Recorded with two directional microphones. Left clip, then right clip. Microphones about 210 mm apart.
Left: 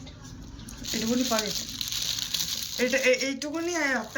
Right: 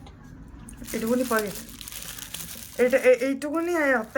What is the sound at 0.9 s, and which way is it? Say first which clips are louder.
Crumpling: right 3 dB; 10° right (ahead or behind).